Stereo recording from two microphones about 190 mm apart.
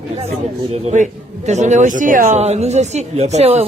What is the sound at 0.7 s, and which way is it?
A man's voice, 40° right (ahead or behind).